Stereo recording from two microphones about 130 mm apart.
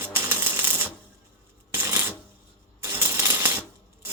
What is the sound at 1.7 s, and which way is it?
Shuffling cards, 20° right (ahead or behind).